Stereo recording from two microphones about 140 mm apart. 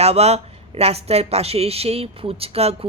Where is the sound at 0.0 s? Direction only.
50° right (ahead or behind).